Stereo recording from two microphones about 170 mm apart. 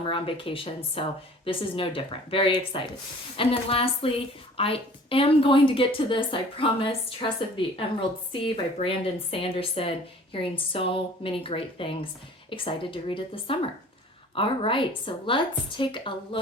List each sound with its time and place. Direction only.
0.0 s a woman's voice: 30° left (ahead or behind)